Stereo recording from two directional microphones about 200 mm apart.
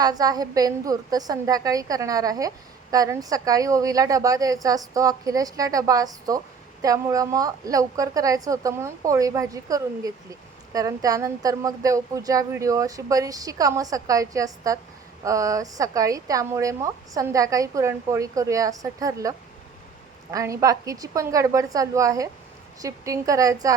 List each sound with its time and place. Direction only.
0.0 s a woman's voice: 20° right (ahead or behind)
20.3 s speech: 15° right (ahead or behind)